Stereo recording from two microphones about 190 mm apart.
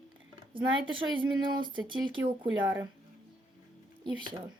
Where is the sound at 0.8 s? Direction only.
25° right (ahead or behind).